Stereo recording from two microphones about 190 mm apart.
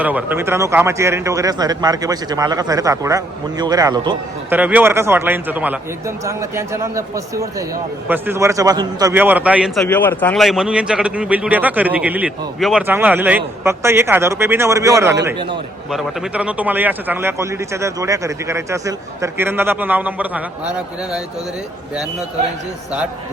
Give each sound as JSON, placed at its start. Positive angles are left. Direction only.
{"t": 0.0, "sound": "a man's voice", "side_deg": -10}
{"t": 4.4, "sound": "a man's voice", "side_deg": -10}
{"t": 15.9, "sound": "a man's voice", "side_deg": 0}